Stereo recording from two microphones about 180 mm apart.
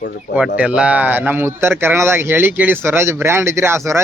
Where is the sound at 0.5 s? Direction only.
5° right (ahead or behind).